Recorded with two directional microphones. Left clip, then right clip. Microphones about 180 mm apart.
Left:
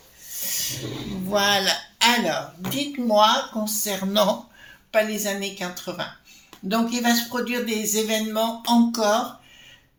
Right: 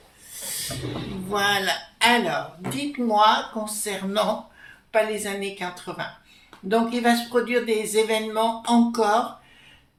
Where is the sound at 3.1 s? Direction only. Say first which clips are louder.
Left 1 dB; 45° left (ahead or behind).